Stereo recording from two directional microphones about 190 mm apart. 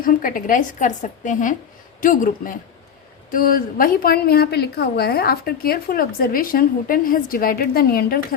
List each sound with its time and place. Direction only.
0.0 s a woman's voice: 45° left (ahead or behind)